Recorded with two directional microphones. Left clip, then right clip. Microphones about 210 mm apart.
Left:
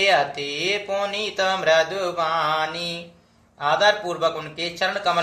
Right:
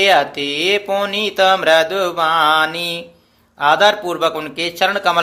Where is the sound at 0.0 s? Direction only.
45° right (ahead or behind).